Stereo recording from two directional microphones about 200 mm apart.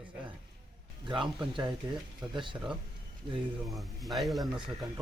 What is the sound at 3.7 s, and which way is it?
Speech, centre (ahead or behind).